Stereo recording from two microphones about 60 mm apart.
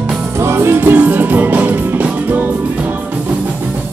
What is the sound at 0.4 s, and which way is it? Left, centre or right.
Music, right.